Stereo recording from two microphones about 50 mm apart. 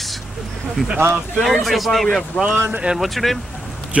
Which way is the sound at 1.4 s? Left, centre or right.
Centre.